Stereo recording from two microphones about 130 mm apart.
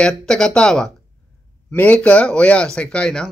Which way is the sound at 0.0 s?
5° left (ahead or behind).